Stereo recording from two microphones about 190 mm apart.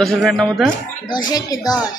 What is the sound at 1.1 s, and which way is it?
Speech, 20° left (ahead or behind).